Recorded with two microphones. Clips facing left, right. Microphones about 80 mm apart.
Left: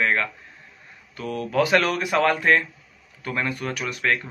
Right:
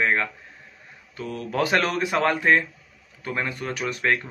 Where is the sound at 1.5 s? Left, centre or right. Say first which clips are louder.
Left 2 dB; right.